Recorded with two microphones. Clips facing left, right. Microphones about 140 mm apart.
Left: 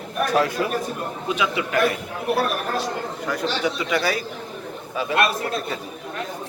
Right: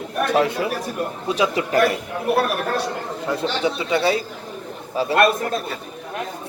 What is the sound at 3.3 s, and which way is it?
Speech, 25° right (ahead or behind).